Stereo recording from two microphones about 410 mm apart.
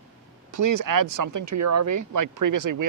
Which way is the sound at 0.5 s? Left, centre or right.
Right.